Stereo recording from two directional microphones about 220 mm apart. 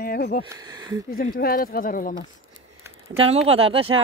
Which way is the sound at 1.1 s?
40° left (ahead or behind).